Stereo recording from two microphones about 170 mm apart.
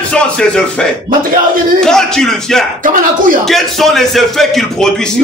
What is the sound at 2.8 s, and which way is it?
Speech, 50° right (ahead or behind).